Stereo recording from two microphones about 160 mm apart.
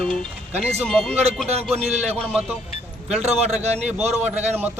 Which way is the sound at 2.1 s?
5° left (ahead or behind).